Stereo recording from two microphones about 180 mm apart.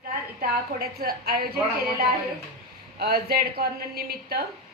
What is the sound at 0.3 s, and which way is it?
Speech, 55° right (ahead or behind).